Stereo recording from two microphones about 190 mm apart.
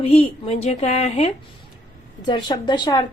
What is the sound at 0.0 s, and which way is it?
Speech, 30° left (ahead or behind).